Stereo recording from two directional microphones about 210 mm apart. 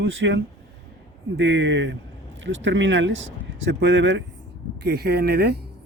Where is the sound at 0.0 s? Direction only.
65° right (ahead or behind).